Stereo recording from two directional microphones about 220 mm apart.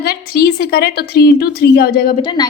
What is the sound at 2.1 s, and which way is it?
Speech, 20° left (ahead or behind).